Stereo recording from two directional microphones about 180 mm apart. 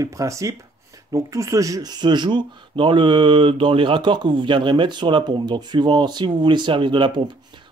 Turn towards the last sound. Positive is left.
turn(degrees=-25)  # may be behind; listen again after turning